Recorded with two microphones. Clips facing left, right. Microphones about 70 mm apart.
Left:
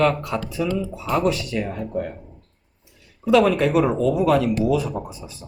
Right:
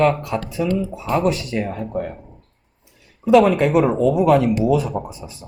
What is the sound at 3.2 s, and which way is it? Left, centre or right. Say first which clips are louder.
Speech: right 3 dB; right.